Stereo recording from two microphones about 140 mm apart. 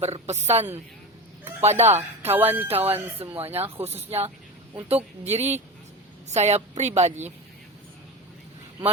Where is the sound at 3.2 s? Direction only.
45° right (ahead or behind).